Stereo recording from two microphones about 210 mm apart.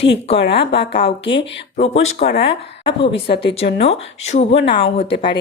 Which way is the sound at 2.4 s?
25° left (ahead or behind).